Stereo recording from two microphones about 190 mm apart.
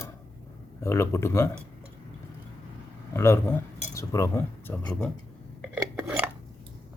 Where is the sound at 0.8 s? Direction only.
15° left (ahead or behind).